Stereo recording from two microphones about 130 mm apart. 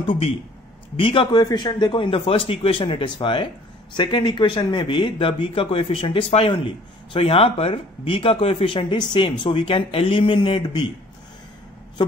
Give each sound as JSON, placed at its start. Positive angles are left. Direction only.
{"t": 0.0, "sound": "a man's voice", "side_deg": 45}